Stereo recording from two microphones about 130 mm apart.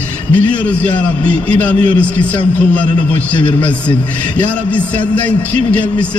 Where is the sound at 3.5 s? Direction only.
10° left (ahead or behind).